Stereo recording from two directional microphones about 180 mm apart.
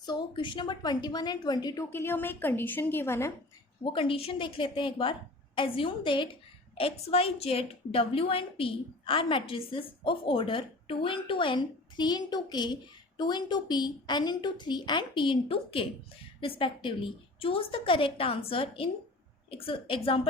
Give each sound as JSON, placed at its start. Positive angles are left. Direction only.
{"t": 0.0, "sound": "a woman's voice", "side_deg": 25}
{"t": 1.9, "sound": "a woman's voice", "side_deg": 10}
{"t": 3.8, "sound": "a woman's voice", "side_deg": 30}